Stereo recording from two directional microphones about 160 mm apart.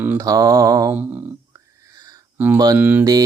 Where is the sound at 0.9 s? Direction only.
10° right (ahead or behind).